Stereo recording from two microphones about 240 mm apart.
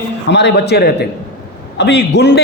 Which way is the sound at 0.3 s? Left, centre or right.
Left.